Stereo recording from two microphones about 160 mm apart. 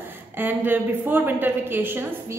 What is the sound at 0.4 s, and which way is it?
A woman's voice, 10° right (ahead or behind).